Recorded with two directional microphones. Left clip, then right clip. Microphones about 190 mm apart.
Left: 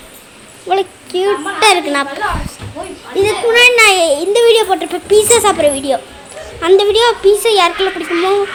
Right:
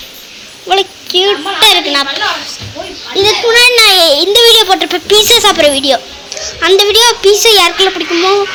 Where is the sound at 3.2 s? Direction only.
10° left (ahead or behind).